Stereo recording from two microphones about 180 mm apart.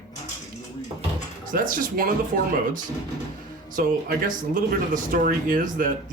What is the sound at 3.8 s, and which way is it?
Speech, 55° right (ahead or behind).